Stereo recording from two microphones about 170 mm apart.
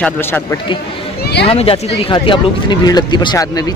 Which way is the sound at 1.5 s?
35° left (ahead or behind).